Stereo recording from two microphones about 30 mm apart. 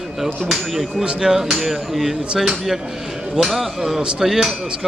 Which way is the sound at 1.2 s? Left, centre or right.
Centre.